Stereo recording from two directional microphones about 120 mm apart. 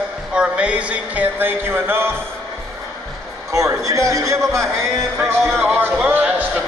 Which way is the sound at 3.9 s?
25° right (ahead or behind).